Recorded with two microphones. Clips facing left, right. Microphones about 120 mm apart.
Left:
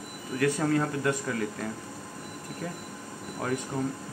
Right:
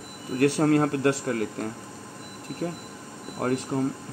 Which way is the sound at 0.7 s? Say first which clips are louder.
Right 5 dB; 55° right (ahead or behind).